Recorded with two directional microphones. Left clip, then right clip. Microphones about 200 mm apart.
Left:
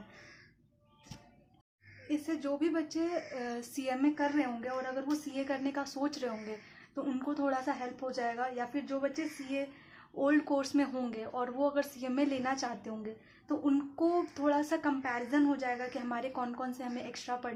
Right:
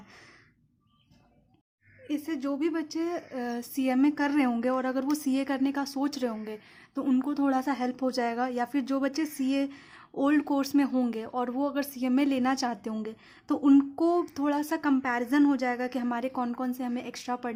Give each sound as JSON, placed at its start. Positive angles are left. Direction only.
{"t": 2.0, "sound": "a woman's voice", "side_deg": -30}